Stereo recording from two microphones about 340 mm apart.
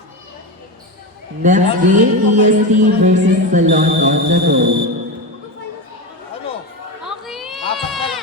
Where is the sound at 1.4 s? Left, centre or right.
Right.